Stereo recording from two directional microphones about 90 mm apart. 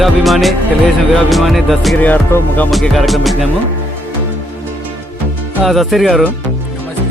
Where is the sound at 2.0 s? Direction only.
20° left (ahead or behind).